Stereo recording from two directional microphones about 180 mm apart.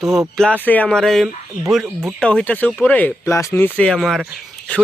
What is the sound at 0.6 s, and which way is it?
Speech, 10° left (ahead or behind).